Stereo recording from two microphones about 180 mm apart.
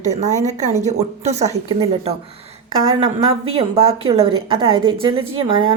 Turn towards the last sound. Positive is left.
turn(degrees=-30)  # may be behind; listen again after turning